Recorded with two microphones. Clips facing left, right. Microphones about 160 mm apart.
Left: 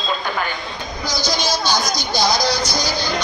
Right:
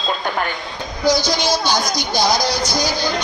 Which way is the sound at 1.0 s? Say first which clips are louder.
Right 6 dB; 55° right (ahead or behind).